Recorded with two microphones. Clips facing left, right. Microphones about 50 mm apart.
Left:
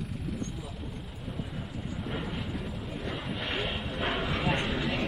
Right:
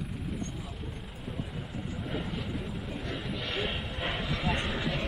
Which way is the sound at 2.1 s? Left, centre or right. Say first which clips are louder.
Even; centre.